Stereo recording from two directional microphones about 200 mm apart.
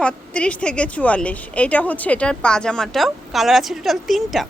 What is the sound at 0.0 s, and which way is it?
A woman's voice, 5° left (ahead or behind).